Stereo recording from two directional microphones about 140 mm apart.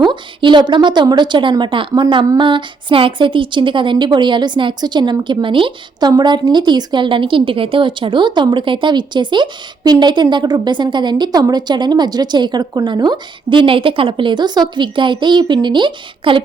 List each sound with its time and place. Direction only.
0.0 s a woman's voice: 35° right (ahead or behind)